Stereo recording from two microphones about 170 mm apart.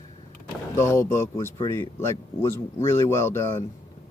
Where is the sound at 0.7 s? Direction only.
15° left (ahead or behind).